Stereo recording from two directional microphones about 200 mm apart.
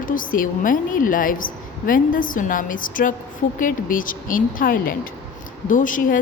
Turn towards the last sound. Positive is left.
turn(degrees=40)  # may be behind; listen again after turning